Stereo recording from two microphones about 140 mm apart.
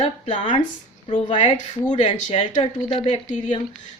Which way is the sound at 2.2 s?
45° left (ahead or behind).